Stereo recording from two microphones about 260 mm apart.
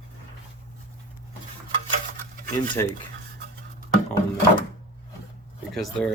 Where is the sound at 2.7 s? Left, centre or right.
Centre.